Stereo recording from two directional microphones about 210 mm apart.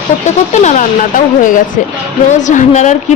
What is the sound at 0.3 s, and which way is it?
Speech, 35° left (ahead or behind).